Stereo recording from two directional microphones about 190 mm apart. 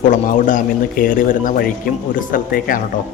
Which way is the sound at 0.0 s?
40° left (ahead or behind).